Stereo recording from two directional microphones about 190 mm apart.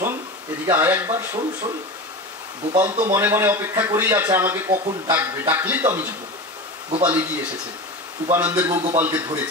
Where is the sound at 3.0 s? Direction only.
15° right (ahead or behind).